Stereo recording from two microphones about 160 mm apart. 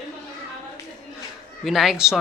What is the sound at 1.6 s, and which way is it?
Speech, centre (ahead or behind).